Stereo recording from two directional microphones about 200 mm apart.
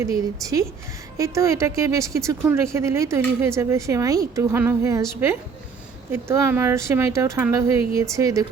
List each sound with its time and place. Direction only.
0.0 s speech: 15° right (ahead or behind)
6.1 s speech: 15° right (ahead or behind)